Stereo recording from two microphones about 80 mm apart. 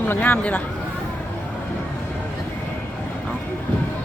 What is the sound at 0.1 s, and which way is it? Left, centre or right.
Speech, left.